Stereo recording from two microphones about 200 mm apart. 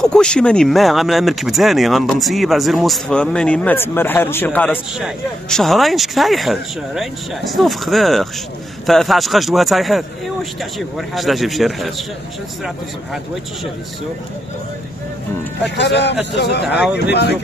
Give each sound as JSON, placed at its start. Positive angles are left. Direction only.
{"t": 0.0, "sound": "speech", "side_deg": 5}
{"t": 15.6, "sound": "speech", "side_deg": 60}